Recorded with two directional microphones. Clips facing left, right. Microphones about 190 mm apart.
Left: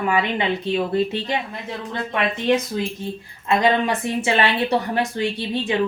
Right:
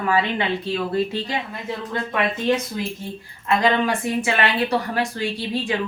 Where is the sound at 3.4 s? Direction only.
25° left (ahead or behind).